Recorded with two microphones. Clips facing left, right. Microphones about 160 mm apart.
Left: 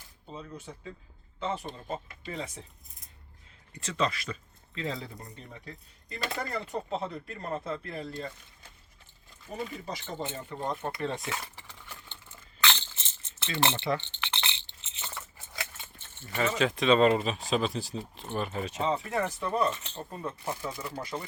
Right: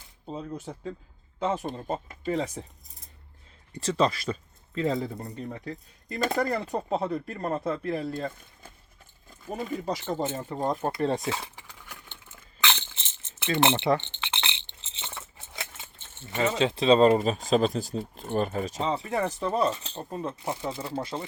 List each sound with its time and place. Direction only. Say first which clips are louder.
0.3 s speech: right 7 dB; 40° right (ahead or behind)
3.8 s speech: right 6 dB; 35° right (ahead or behind)
4.8 s speech: right 8 dB; 50° right (ahead or behind)
9.5 s speech: right 6 dB; 50° right (ahead or behind)
11.5 s a sound: right 1 dB; 10° right (ahead or behind)
13.6 s speech: right 5 dB; 20° right (ahead or behind)
14.2 s keys jangling: right 2 dB; 20° right (ahead or behind); by 17.9 s 45° right (ahead or behind)
18.1 s speech: right 6 dB; 45° right (ahead or behind); by 21.2 s 25° right (ahead or behind)